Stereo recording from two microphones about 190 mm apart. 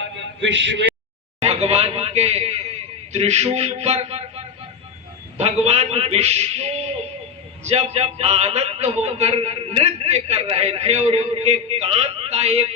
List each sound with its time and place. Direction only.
0.4 s speech: 75° right (ahead or behind)
1.4 s a sound: 35° right (ahead or behind)
3.1 s a man's voice: 35° right (ahead or behind)